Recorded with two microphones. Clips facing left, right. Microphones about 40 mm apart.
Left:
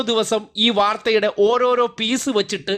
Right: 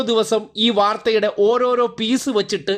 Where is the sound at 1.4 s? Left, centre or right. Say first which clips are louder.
Even; left.